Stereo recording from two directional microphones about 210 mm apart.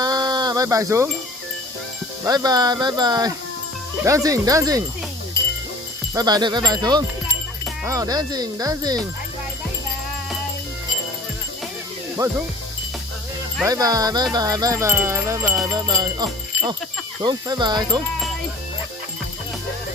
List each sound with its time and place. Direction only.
0.0 s a sound: 20° right (ahead or behind)
2.2 s speech: 20° right (ahead or behind)
4.0 s wind chime: 15° right (ahead or behind)
6.1 s speech: 20° right (ahead or behind)
7.9 s wind chime: 15° right (ahead or behind)
12.2 s wind chime: 15° right (ahead or behind)
13.7 s wind chime: 15° right (ahead or behind)
17.2 s speech: 20° right (ahead or behind)